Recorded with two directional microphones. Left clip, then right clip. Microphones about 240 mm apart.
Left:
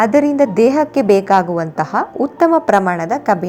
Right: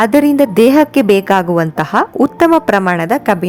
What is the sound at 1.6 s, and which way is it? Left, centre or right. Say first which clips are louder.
A woman's voice: right 4 dB; right.